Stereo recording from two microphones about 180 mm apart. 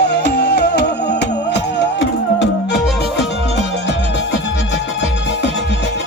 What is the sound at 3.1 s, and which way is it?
Music, 70° left (ahead or behind).